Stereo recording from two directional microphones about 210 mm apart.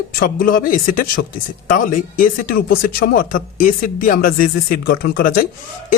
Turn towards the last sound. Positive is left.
turn(degrees=40)  # may be behind; listen again after turning